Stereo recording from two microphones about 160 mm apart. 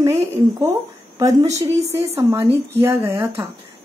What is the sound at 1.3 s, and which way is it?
Speech, 20° right (ahead or behind).